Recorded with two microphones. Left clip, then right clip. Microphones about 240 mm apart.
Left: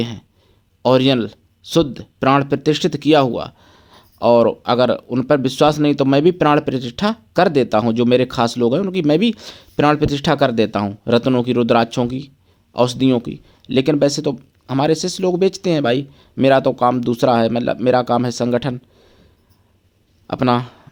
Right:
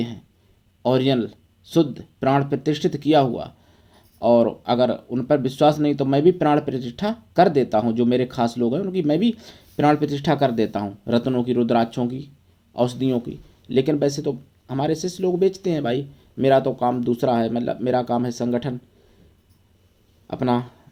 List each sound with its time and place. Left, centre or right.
0.8 s speech: left
20.2 s speech: left